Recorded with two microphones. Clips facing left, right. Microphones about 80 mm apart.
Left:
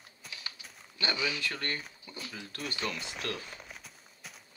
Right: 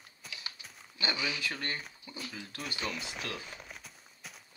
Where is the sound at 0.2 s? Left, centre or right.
Centre.